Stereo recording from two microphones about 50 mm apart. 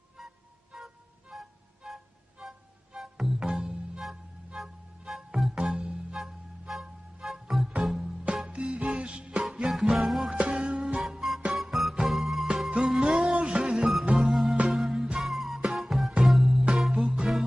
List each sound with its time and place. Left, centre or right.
0.7 s music: centre
6.7 s music: centre
8.5 s music: centre
9.7 s music: centre
10.3 s music: centre
11.0 s music: centre